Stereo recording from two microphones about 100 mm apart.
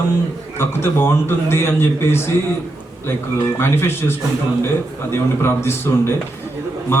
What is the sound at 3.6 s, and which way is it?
Speech, 25° left (ahead or behind).